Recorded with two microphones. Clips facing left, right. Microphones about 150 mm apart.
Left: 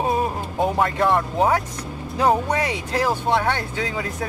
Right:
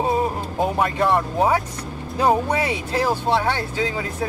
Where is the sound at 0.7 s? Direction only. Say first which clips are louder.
Even; 5° right (ahead or behind).